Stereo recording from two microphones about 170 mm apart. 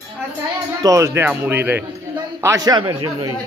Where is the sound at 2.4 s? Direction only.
20° right (ahead or behind).